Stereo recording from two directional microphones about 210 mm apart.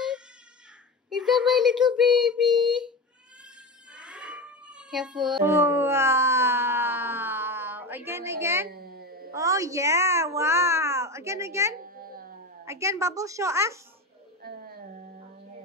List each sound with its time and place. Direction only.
1.1 s speech: centre (ahead or behind)
2.2 s child singing: 5° right (ahead or behind)
3.9 s a sound: 5° right (ahead or behind)
8.6 s a sound: 45° right (ahead or behind)
9.3 s a child's voice: 15° right (ahead or behind)
11.8 s babbling: 45° right (ahead or behind)
12.6 s a woman's voice: 15° right (ahead or behind)
14.4 s music: 45° right (ahead or behind)